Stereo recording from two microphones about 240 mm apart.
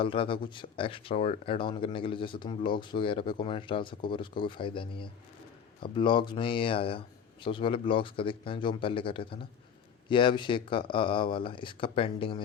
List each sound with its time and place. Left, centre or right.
0.0 s speech: left